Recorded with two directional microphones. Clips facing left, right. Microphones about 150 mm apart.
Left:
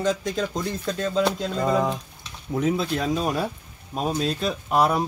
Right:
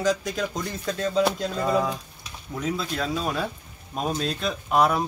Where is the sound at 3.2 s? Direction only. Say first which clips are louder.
Left 2 dB; 10° left (ahead or behind).